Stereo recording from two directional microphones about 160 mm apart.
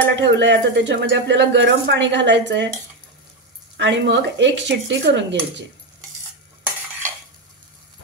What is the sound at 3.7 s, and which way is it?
Speech, 90° right.